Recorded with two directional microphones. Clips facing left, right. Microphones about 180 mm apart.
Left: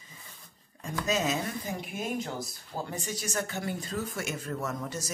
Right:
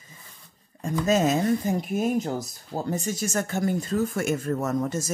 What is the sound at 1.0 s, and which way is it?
Speech, 50° right (ahead or behind).